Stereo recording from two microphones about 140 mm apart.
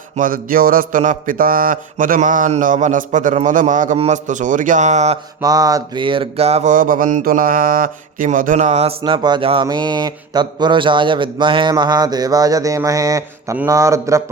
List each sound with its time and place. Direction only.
0.2 s mantra: 90° right; by 3.9 s 65° right (ahead or behind)
3.9 s a man's voice: 55° right (ahead or behind)
5.4 s a man's voice: 25° right (ahead or behind); by 6.7 s 50° right (ahead or behind)
6.7 s mantra: 80° right; by 8.9 s 55° right (ahead or behind)
9.0 s a man's voice: 35° right (ahead or behind)
11.7 s a sound: 30° right (ahead or behind)